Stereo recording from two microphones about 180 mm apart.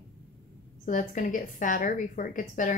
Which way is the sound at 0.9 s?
45° left (ahead or behind).